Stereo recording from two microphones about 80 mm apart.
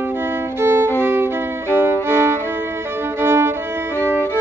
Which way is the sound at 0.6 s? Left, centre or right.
Right.